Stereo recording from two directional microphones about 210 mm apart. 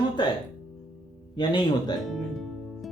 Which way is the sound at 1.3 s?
20° left (ahead or behind).